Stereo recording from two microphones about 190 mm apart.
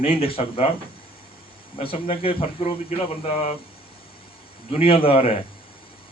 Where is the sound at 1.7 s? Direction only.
30° left (ahead or behind).